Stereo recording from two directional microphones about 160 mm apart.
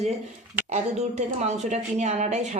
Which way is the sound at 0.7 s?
45° right (ahead or behind).